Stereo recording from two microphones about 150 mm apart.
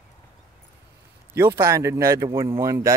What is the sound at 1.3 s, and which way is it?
A man's voice, 15° right (ahead or behind).